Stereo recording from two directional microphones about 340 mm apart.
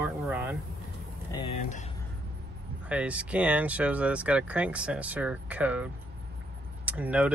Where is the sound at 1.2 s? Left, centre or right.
Centre.